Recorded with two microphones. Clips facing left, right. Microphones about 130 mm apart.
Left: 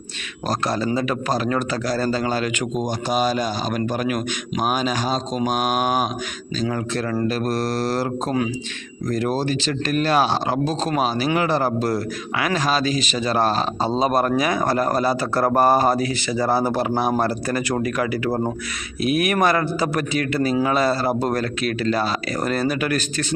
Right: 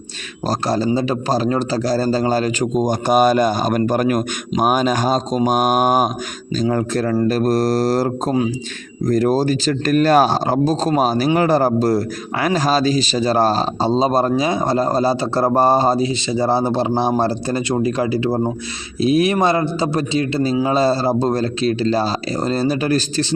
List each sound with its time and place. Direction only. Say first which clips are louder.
0.4 s a man's voice: right 4 dB; 35° right (ahead or behind)